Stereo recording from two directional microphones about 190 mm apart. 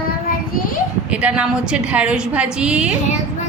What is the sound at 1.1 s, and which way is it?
A woman's voice, 5° right (ahead or behind).